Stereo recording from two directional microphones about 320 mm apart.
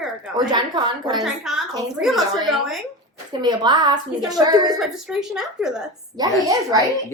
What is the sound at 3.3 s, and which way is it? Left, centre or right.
A woman's voice, centre.